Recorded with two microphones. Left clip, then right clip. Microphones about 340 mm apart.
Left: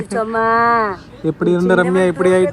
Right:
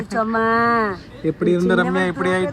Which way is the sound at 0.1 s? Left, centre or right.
Centre.